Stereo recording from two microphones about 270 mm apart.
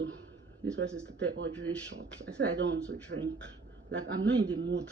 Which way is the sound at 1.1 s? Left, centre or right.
Right.